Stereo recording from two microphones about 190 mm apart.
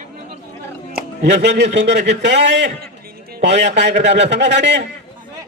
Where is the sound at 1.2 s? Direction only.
65° right (ahead or behind).